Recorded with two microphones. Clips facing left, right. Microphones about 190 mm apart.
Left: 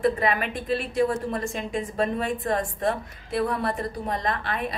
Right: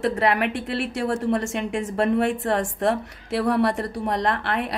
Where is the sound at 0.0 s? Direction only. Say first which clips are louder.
Right 2 dB; 75° right (ahead or behind).